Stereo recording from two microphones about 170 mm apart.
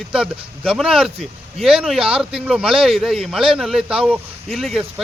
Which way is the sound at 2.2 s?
5° right (ahead or behind).